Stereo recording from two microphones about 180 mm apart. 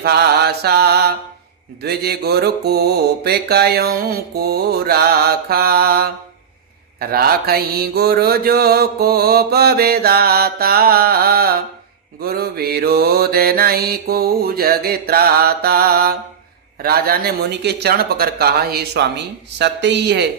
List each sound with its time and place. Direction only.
0.0 s mantra: 65° right (ahead or behind)